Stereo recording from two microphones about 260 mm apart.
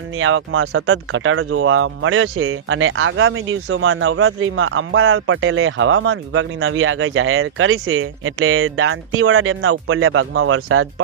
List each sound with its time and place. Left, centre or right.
0.2 s speech: right